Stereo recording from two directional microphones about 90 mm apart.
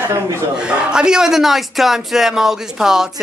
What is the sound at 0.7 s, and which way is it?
A man's voice, 10° right (ahead or behind).